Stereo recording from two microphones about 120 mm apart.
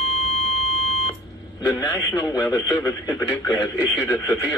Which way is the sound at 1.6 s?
30° left (ahead or behind).